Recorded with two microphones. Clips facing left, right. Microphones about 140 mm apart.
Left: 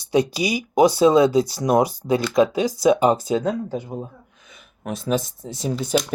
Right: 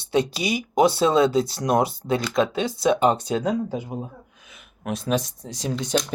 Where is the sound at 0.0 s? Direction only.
25° right (ahead or behind).